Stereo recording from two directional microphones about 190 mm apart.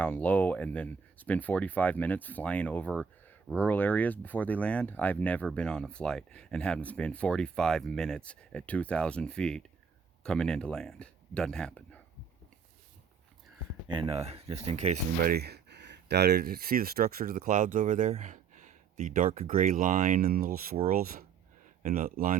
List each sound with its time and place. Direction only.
0.0 s speech: 10° left (ahead or behind)
13.8 s speech: 25° right (ahead or behind); by 22.4 s 45° right (ahead or behind)